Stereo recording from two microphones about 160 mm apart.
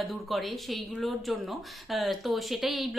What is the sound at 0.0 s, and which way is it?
Speech, centre (ahead or behind).